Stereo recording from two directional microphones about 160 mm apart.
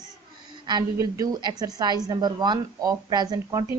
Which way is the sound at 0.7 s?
25° right (ahead or behind).